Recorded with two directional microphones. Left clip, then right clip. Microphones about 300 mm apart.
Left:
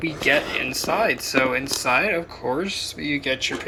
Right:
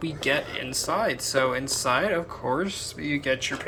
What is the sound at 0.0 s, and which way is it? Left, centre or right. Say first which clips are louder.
Speech: left 6 dB; centre.